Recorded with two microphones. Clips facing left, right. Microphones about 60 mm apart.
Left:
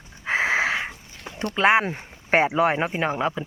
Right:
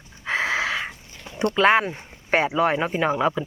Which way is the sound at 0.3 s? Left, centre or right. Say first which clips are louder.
Left 2 dB; left.